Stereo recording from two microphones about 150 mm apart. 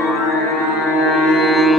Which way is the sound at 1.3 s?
Centre (ahead or behind).